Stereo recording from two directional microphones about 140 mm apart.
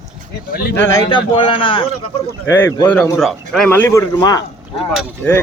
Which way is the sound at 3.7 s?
15° left (ahead or behind).